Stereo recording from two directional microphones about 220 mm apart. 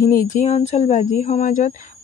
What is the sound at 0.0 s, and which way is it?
Speech, 40° left (ahead or behind).